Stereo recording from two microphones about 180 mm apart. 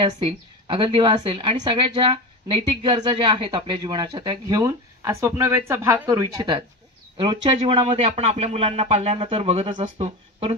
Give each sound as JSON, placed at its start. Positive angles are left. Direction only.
{"t": 0.0, "sound": "a woman's voice", "side_deg": -30}